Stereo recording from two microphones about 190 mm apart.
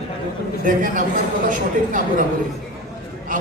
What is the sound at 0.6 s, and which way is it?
Speech, 45° right (ahead or behind).